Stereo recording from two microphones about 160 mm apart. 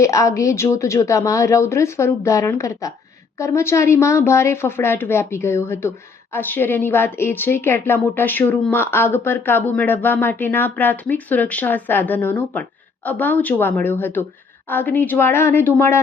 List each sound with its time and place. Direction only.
0.0 s a woman's voice: 20° left (ahead or behind)